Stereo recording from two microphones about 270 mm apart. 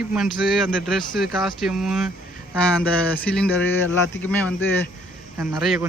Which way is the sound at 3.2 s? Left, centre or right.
Centre.